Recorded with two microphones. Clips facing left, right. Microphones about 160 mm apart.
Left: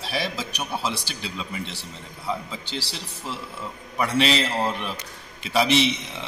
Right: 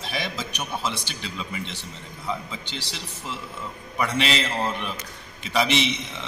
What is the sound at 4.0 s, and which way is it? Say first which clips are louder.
Speech: left 3 dB; centre (ahead or behind).